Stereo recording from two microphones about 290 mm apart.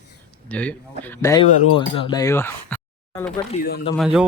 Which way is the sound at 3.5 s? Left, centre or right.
Left.